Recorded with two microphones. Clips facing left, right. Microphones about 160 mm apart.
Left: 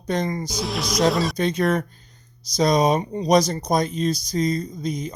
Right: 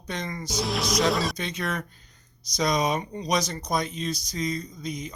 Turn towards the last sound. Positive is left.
turn(degrees=35)  # may be behind; listen again after turning